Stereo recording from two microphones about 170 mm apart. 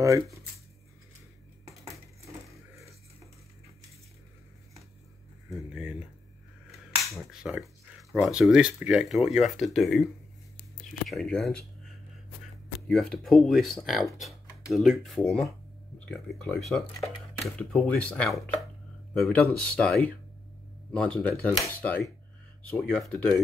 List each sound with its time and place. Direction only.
0.0 s speech: 20° right (ahead or behind)
5.7 s speech: 5° right (ahead or behind)
7.4 s speech: centre (ahead or behind)
11.1 s speech: centre (ahead or behind)
12.8 s speech: 5° left (ahead or behind)
19.4 s speech: 5° left (ahead or behind)